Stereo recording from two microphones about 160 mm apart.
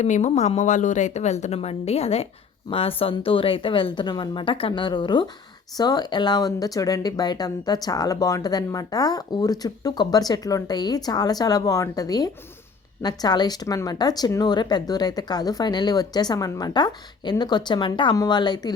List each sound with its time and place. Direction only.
0.0 s a woman's voice: 45° left (ahead or behind); by 18.7 s 25° left (ahead or behind)